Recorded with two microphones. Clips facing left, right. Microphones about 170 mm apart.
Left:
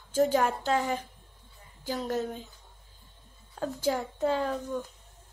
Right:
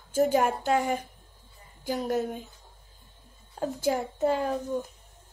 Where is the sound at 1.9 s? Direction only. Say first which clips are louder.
Right 3 dB; 10° right (ahead or behind).